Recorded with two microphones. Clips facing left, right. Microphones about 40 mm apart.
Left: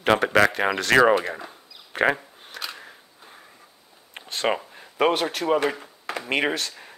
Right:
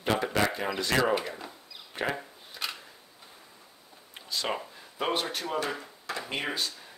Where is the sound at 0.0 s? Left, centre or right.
Left.